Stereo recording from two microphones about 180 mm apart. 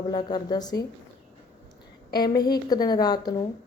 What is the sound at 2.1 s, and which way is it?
Speech, 20° left (ahead or behind).